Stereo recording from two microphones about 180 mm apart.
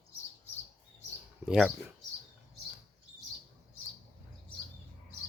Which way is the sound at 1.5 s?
Centre (ahead or behind).